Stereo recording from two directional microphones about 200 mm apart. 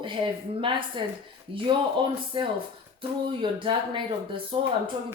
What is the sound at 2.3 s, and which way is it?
Speech, 25° right (ahead or behind).